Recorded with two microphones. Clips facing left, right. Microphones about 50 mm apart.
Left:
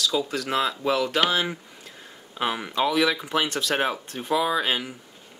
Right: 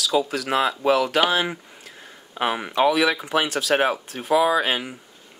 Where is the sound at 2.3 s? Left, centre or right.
Right; by 3.8 s centre.